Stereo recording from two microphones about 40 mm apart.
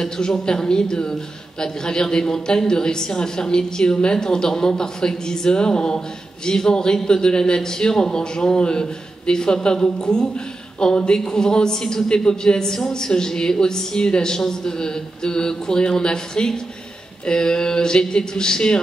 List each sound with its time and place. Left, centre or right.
0.0 s a man's voice: centre